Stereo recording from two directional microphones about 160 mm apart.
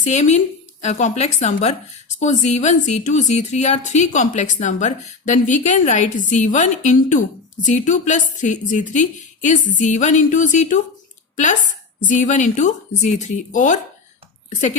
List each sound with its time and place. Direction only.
0.0 s a woman's voice: 45° left (ahead or behind)
12.0 s a woman's voice: 50° left (ahead or behind)